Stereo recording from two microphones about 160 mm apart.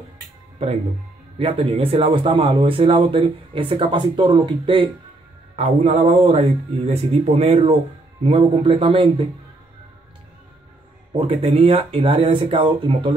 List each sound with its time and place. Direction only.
1.4 s speech: 35° right (ahead or behind)
5.6 s speech: 45° right (ahead or behind)
11.1 s speech: 35° right (ahead or behind)